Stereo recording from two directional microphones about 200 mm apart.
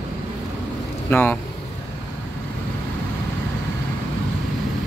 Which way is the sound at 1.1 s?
10° left (ahead or behind).